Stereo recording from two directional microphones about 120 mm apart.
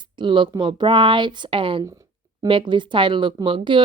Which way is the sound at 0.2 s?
45° right (ahead or behind).